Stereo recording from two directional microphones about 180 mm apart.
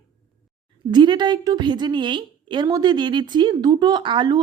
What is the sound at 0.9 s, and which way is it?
A woman's voice, 25° right (ahead or behind).